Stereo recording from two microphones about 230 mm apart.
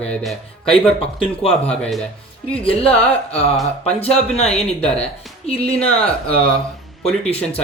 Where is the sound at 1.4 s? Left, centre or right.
Centre.